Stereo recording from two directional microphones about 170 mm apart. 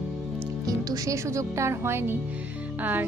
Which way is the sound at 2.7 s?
10° right (ahead or behind).